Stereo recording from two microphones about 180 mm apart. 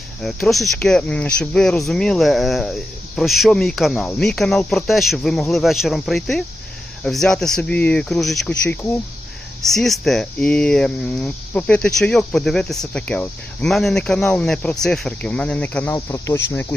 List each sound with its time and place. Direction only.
0.2 s speech: centre (ahead or behind)